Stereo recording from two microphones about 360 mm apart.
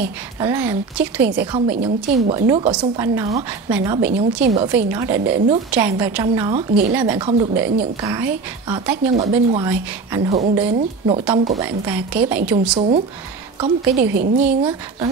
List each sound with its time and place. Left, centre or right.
0.4 s a woman's voice: centre
3.3 s a woman's voice: centre
11.3 s a woman's voice: centre
11.6 s speech: centre
12.7 s a woman's voice: centre